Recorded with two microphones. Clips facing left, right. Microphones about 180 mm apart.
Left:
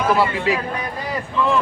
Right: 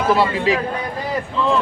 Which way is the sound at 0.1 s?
30° right (ahead or behind).